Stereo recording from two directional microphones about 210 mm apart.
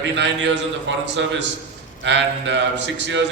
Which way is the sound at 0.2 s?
55° right (ahead or behind).